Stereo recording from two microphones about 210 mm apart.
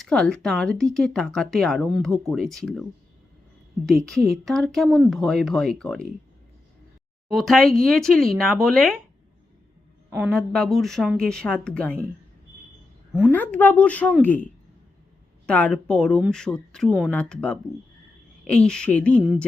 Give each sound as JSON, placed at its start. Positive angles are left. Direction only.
{"t": 0.0, "sound": "speech", "side_deg": 5}
{"t": 3.8, "sound": "speech", "side_deg": 0}
{"t": 7.3, "sound": "speech", "side_deg": 0}
{"t": 10.1, "sound": "a woman's voice", "side_deg": -10}
{"t": 10.3, "sound": "speech", "side_deg": 5}
{"t": 13.3, "sound": "speech", "side_deg": 5}
{"t": 15.4, "sound": "speech", "side_deg": 5}